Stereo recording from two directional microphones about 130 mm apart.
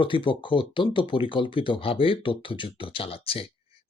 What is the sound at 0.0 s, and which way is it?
Speech, 40° left (ahead or behind).